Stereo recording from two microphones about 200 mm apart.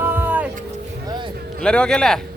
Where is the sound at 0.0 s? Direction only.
10° right (ahead or behind).